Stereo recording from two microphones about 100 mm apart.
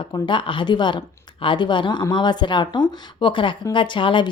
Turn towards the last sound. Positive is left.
turn(degrees=55)  # may be behind; listen again after turning